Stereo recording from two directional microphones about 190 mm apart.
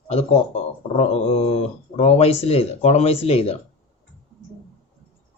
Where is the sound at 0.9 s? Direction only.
30° left (ahead or behind).